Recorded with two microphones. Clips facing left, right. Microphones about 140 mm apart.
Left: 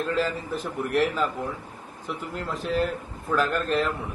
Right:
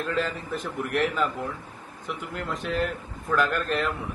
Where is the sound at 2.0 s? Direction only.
35° left (ahead or behind).